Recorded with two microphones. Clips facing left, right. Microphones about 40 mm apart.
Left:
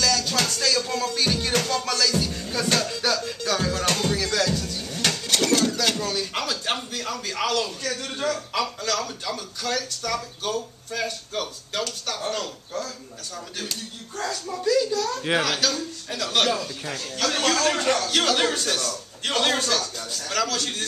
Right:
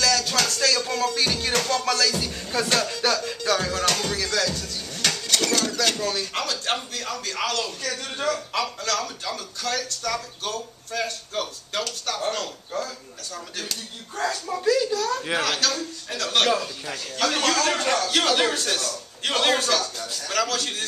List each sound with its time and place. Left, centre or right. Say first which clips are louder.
0.0 s a sound: right 1 dB; centre
0.6 s music: right 1 dB; centre
2.6 s a man's voice: right 1 dB; centre
4.0 s music: left 1 dB; centre
4.6 s dishes: left 1 dB; centre
5.4 s a sound: left 5 dB; centre
5.9 s a man's voice: even; centre
7.9 s a man's voice: right 2 dB; centre
11.3 s a man's voice: right 1 dB; centre
14.1 s a man's voice: right 3 dB; centre
15.4 s a man's voice: even; centre